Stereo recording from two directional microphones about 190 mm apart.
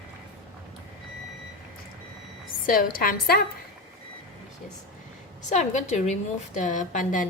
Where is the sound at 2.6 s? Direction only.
45° left (ahead or behind).